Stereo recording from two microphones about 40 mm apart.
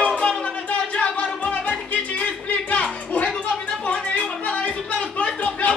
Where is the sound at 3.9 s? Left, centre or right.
Left.